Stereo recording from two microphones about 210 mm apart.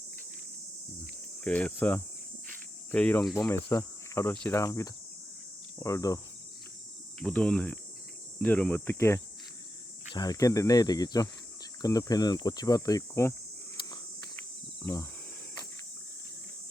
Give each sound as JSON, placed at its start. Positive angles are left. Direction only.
{"t": 1.5, "sound": "speech", "side_deg": 5}
{"t": 7.2, "sound": "speech", "side_deg": 5}